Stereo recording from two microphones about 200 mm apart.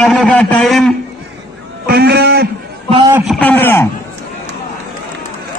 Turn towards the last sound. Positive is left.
turn(degrees=10)  # may be behind; listen again after turning